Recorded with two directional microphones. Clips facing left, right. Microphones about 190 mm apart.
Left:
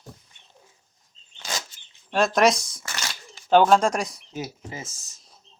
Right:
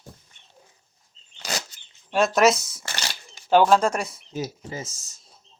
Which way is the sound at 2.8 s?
30° right (ahead or behind).